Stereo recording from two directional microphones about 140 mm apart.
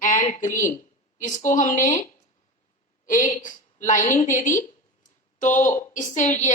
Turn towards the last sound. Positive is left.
turn(degrees=60)  # may be behind; listen again after turning